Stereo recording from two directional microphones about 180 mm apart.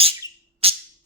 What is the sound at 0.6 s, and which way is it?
Music, 30° right (ahead or behind).